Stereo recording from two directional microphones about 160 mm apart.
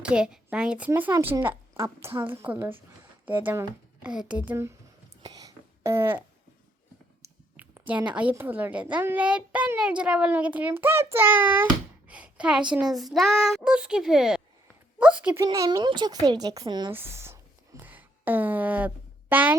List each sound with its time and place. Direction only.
0.0 s a child's voice: 5° right (ahead or behind)
5.2 s whispering: 25° right (ahead or behind)
7.5 s a woman's voice: 10° right (ahead or behind)
15.4 s a woman's voice: 20° right (ahead or behind)
16.9 s a sound: 15° right (ahead or behind)